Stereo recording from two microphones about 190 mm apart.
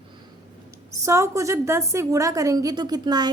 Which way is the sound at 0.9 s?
15° right (ahead or behind).